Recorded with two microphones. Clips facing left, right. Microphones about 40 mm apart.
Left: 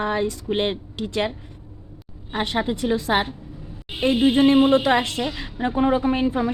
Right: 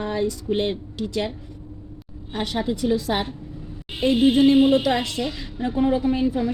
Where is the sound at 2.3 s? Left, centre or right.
Left.